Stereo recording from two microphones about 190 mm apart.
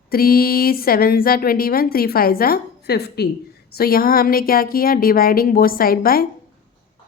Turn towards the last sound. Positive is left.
turn(degrees=50)  # may be behind; listen again after turning